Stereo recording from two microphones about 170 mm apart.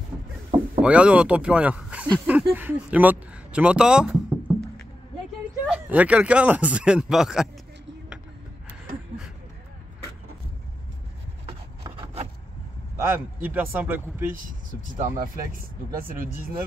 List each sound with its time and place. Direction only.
0.8 s speech: 5° right (ahead or behind)
12.9 s speech: 10° right (ahead or behind)
14.3 s speech: 55° right (ahead or behind)